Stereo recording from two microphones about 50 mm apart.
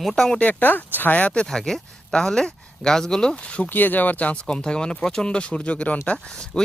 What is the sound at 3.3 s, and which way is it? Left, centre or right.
Speech, left.